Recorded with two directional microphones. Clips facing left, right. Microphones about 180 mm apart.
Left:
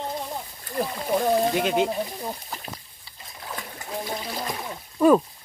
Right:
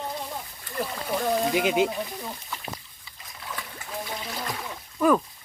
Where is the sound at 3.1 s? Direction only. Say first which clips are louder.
Left 2 dB; 35° left (ahead or behind).